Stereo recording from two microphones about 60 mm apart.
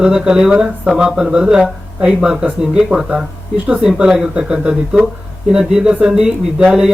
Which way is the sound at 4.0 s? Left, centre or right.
Centre.